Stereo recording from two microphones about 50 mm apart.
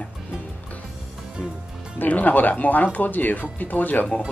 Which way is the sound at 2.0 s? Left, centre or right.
Left.